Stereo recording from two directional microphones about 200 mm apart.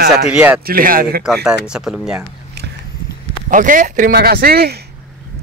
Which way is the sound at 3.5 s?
40° right (ahead or behind).